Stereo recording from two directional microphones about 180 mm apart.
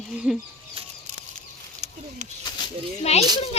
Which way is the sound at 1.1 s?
40° right (ahead or behind).